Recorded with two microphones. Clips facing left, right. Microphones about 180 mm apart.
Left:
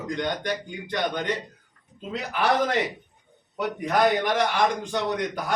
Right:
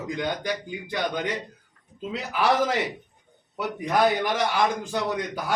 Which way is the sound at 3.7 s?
5° right (ahead or behind).